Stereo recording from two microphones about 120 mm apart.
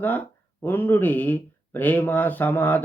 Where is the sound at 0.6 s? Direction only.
15° left (ahead or behind).